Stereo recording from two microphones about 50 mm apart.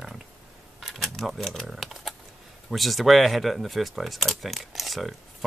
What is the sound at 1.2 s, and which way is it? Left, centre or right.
Speech, centre.